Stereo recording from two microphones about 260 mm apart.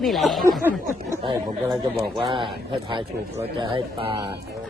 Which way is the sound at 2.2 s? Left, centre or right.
Centre.